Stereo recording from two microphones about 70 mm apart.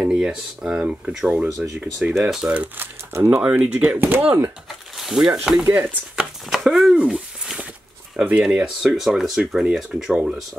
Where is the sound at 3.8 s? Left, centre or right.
Right.